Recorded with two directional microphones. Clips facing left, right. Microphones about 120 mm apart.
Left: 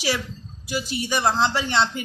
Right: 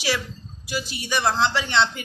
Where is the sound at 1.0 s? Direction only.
30° left (ahead or behind).